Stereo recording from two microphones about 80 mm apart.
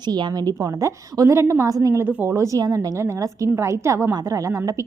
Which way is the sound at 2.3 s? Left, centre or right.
Right.